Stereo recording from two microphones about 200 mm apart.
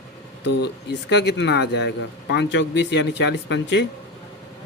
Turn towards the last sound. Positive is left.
turn(degrees=60)  # may be behind; listen again after turning